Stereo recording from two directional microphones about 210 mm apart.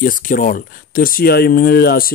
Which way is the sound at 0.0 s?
40° left (ahead or behind).